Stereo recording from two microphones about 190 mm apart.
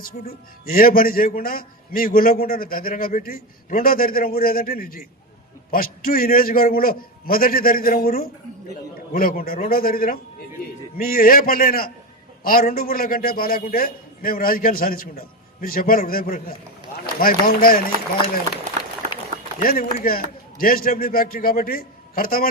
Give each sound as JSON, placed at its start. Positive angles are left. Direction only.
{"t": 0.3, "sound": "a man's voice", "side_deg": 50}
{"t": 19.5, "sound": "a man's voice", "side_deg": 50}